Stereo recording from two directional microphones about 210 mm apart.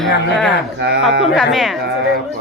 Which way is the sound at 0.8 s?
50° right (ahead or behind).